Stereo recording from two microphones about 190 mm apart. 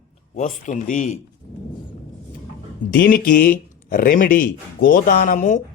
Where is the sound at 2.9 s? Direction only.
60° left (ahead or behind).